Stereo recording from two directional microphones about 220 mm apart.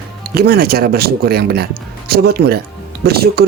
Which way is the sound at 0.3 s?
45° right (ahead or behind).